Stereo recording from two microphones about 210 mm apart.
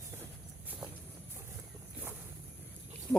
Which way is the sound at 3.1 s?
15° right (ahead or behind).